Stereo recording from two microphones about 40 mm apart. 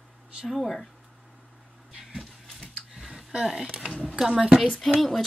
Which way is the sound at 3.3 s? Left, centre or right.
Centre.